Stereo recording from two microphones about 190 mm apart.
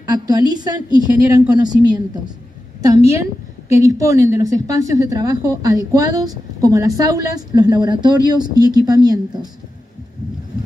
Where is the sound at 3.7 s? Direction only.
15° right (ahead or behind).